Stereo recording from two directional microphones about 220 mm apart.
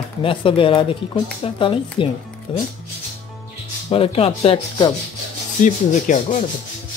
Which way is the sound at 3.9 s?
25° left (ahead or behind).